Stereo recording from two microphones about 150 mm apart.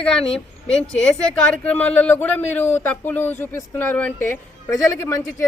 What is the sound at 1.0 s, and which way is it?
Speech, 5° left (ahead or behind).